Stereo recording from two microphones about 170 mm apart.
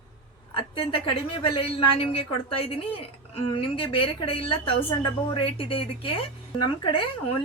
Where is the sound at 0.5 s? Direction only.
30° left (ahead or behind).